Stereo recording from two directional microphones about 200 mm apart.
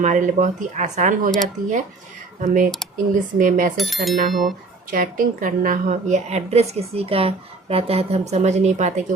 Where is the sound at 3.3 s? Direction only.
40° right (ahead or behind).